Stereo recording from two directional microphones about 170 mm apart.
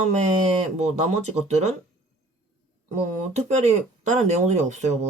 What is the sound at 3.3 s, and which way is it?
Speech, 40° right (ahead or behind).